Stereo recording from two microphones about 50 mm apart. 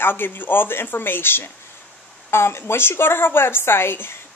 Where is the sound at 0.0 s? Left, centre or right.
Left.